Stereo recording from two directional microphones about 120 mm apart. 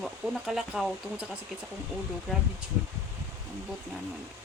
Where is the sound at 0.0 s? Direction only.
5° right (ahead or behind).